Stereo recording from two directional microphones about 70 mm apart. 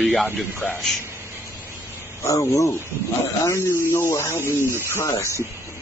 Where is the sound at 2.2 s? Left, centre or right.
Left.